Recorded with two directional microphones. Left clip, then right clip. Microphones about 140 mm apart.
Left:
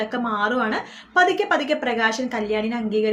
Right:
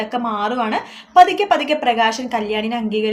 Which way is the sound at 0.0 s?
15° right (ahead or behind).